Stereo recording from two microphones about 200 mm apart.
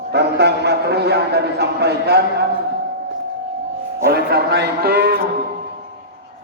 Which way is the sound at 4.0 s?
55° right (ahead or behind).